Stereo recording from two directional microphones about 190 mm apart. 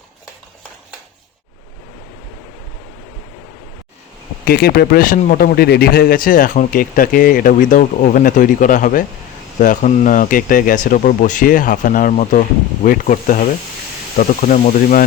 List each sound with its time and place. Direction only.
4.4 s a man's voice: 55° left (ahead or behind)